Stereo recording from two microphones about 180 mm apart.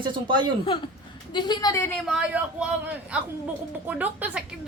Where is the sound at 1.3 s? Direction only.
20° left (ahead or behind).